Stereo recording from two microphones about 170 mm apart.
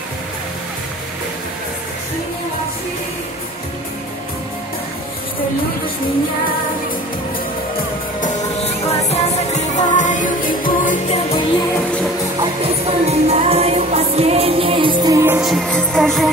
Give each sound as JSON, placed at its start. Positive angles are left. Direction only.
{"t": 8.6, "sound": "music", "side_deg": 40}
{"t": 11.1, "sound": "music", "side_deg": 35}
{"t": 12.4, "sound": "music", "side_deg": -35}
{"t": 15.4, "sound": "music", "side_deg": 0}